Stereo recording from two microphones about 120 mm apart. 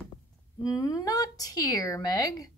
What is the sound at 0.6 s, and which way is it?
Speech, 30° left (ahead or behind).